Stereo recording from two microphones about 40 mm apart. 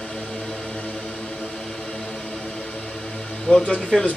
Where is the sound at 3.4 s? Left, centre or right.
Centre.